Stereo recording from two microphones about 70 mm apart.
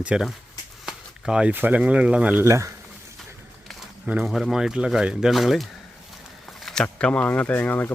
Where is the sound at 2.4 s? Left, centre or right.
Right.